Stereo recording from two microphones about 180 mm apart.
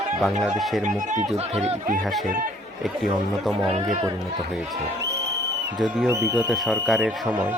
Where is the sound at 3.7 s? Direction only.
35° right (ahead or behind).